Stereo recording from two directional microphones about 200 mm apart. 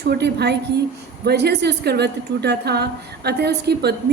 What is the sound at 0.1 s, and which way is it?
A woman's voice, 55° right (ahead or behind).